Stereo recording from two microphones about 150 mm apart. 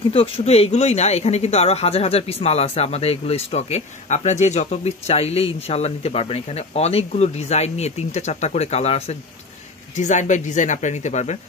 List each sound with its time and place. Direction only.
0.1 s speech: 40° left (ahead or behind)